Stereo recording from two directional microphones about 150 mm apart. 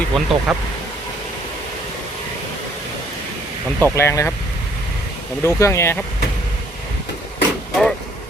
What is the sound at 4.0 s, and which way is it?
Speech, 15° left (ahead or behind).